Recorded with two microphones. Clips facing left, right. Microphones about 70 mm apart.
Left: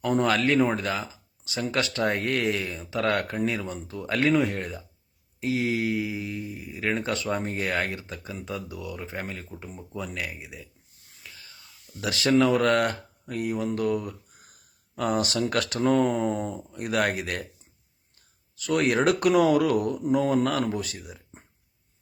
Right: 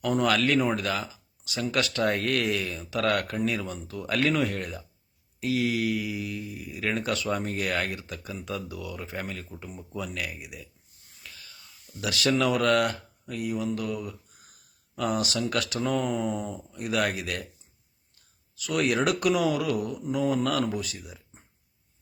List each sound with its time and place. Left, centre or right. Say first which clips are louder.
0.0 s speech: left 1 dB; left
10.1 s speech: left 1 dB; left
11.3 s a sound: even; left
11.9 s speech: left 4 dB; left
18.5 s speech: left 2 dB; left